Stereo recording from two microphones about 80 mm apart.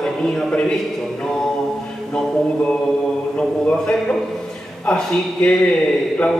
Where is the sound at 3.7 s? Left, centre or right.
Centre.